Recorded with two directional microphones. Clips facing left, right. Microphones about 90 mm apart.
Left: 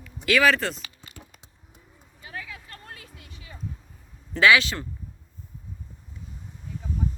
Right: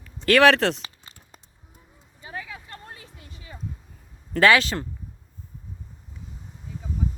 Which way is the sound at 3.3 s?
30° right (ahead or behind).